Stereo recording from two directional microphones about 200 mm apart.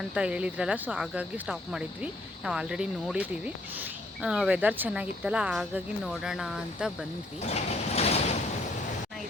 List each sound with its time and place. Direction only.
0.1 s speech: 5° right (ahead or behind)
7.4 s sliding door: 35° left (ahead or behind)